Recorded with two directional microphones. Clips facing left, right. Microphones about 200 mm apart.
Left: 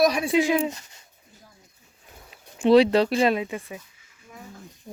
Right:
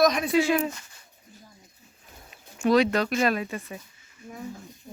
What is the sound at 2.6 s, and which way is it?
Speech, 30° left (ahead or behind).